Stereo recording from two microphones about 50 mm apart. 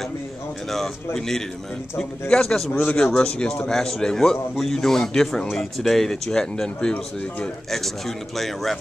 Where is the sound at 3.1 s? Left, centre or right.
Centre.